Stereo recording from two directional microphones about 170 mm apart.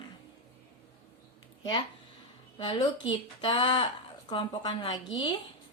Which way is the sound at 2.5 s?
30° left (ahead or behind).